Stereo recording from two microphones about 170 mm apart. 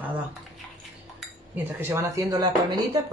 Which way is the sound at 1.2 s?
10° right (ahead or behind).